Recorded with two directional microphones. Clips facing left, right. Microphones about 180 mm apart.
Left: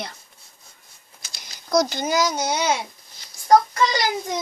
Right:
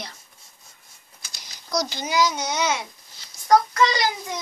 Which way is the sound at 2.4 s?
35° left (ahead or behind).